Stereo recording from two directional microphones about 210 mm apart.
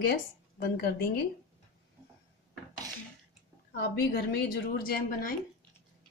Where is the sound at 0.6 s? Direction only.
45° left (ahead or behind).